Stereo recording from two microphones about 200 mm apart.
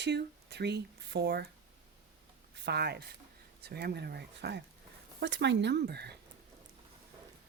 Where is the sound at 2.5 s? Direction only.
55° right (ahead or behind).